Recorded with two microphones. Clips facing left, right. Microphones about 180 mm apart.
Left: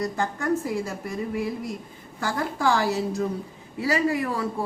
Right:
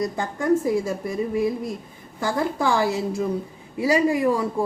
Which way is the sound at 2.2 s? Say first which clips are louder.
Right 2 dB; 15° right (ahead or behind).